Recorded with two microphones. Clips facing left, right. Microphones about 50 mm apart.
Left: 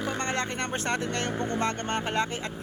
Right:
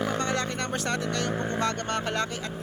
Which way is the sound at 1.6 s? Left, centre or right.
Left.